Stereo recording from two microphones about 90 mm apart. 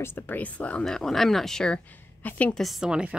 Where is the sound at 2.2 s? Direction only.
15° left (ahead or behind).